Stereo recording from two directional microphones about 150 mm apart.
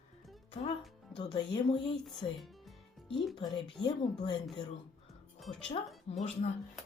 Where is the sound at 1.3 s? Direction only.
30° left (ahead or behind).